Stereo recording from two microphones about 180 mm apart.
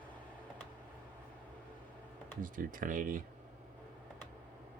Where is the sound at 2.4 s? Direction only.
50° right (ahead or behind).